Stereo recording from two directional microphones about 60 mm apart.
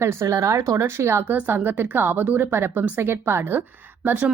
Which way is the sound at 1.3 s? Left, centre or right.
Right.